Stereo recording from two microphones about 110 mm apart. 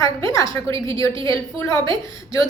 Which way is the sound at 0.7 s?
55° right (ahead or behind).